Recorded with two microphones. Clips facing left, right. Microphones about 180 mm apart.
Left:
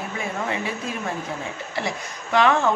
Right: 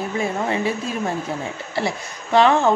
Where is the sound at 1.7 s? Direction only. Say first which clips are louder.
Right 5 dB; 30° right (ahead or behind).